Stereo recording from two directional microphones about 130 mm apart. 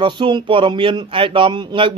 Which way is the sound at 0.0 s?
40° right (ahead or behind).